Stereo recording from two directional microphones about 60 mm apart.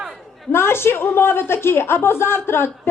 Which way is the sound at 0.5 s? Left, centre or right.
Left.